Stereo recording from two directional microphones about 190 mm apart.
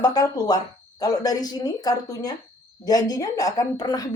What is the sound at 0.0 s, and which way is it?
A woman's voice, 20° left (ahead or behind).